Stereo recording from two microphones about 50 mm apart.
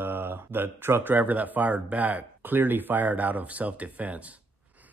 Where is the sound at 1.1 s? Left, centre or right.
Right.